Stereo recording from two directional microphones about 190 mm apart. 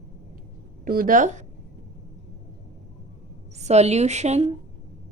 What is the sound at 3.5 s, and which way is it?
Speech, 35° right (ahead or behind).